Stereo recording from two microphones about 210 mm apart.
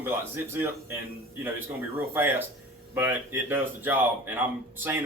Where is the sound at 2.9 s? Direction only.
10° right (ahead or behind).